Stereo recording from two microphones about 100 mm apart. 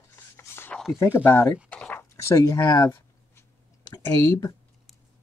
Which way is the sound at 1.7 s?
15° left (ahead or behind).